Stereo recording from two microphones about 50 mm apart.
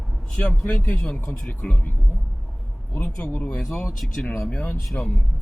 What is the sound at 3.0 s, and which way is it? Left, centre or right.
Speech, left.